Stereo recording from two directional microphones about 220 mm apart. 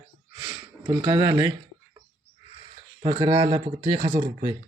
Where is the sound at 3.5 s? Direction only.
15° right (ahead or behind).